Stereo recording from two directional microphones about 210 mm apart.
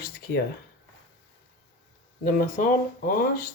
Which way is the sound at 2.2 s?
40° left (ahead or behind).